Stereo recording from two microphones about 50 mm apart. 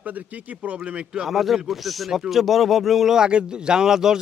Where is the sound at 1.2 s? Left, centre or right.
Centre.